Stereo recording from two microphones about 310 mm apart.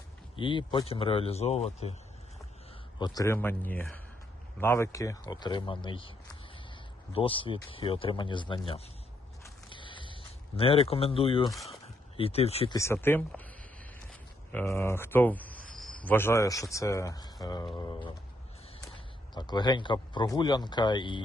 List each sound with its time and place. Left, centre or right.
0.3 s speech: centre
3.0 s speech: centre
9.4 s a sound: centre
10.6 s speech: centre
11.5 s speech: centre
12.1 s speech: centre
14.1 s cricket: centre
16.0 s speech: centre
19.3 s speech: centre